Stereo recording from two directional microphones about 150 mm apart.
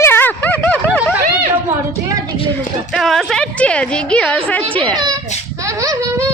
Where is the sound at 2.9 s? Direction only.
Centre (ahead or behind).